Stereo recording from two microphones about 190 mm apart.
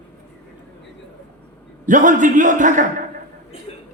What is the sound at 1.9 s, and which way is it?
Speech, 45° right (ahead or behind).